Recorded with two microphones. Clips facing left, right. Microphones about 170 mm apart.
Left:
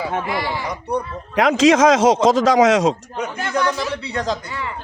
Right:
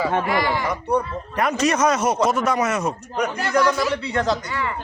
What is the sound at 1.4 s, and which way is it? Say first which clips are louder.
Speech: left 6 dB; 90° left.